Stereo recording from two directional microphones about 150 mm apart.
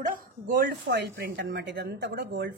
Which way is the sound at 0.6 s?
90° right.